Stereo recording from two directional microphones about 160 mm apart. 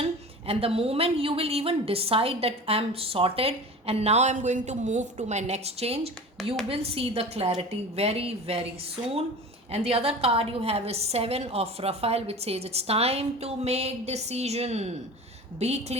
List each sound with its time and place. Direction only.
0.0 s a woman's voice: 35° right (ahead or behind)
9.7 s a woman's voice: 40° right (ahead or behind)